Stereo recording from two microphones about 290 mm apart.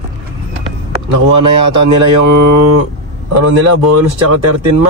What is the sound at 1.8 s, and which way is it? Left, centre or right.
Speech, right.